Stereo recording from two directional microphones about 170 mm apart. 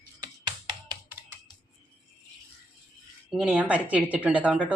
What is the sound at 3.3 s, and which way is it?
Speech, 5° right (ahead or behind).